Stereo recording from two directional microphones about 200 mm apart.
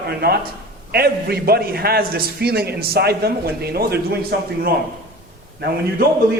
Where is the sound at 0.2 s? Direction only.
50° right (ahead or behind).